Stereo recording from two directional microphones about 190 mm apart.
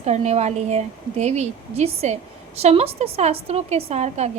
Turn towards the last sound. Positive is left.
turn(degrees=-35)  # may be behind; listen again after turning